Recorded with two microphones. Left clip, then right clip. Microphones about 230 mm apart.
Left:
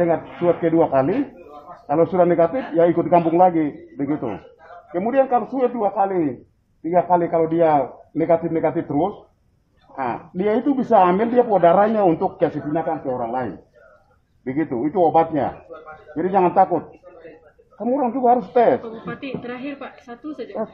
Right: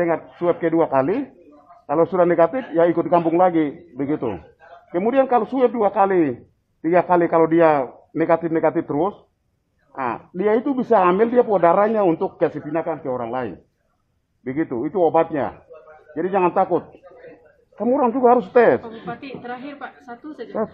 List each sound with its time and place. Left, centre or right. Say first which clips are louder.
0.5 s a man's voice: left 1 dB; right
17.7 s speech: right 3 dB; right
19.0 s a woman's voice: left 1 dB; centre
20.5 s speech: right 3 dB; right